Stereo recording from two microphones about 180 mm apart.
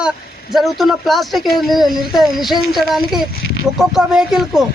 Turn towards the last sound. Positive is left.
turn(degrees=-5)  # may be behind; listen again after turning